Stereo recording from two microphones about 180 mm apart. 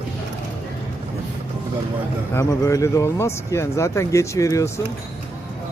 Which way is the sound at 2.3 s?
20° left (ahead or behind).